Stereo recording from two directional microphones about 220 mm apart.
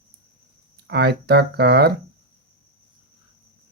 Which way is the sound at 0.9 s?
50° right (ahead or behind).